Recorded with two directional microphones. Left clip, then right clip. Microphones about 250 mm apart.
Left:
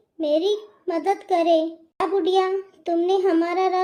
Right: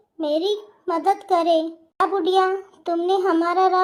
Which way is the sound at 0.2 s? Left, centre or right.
Centre.